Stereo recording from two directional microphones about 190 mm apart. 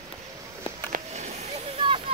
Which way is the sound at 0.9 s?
35° right (ahead or behind).